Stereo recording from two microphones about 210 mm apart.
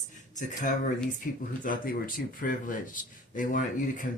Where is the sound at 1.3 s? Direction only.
40° left (ahead or behind).